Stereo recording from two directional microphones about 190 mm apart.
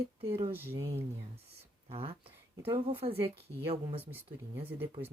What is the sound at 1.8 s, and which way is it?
Speech, 30° right (ahead or behind).